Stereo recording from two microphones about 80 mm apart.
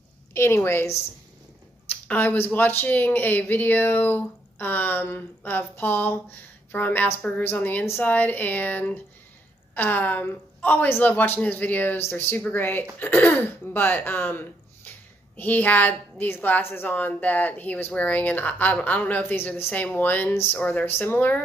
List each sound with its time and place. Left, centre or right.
0.3 s a woman's voice: left
2.0 s a woman's voice: left